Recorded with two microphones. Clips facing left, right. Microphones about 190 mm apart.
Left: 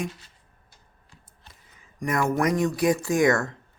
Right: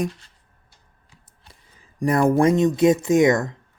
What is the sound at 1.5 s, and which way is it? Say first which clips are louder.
Speech: right 4 dB; 35° right (ahead or behind).